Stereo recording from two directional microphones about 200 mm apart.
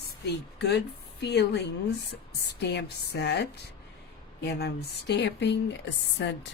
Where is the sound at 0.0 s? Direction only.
55° left (ahead or behind).